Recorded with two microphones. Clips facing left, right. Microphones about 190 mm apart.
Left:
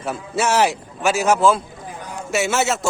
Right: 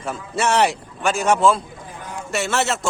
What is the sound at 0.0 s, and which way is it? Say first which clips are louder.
A man's voice: left 1 dB; centre (ahead or behind).